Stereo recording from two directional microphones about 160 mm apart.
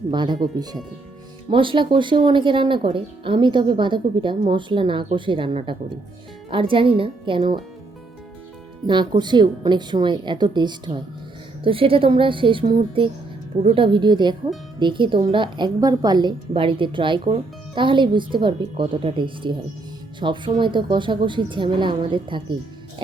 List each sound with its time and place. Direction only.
0.1 s a woman's voice: 30° right (ahead or behind)
8.9 s a woman's voice: 30° right (ahead or behind)